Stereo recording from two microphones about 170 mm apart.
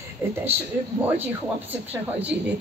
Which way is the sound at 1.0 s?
10° right (ahead or behind).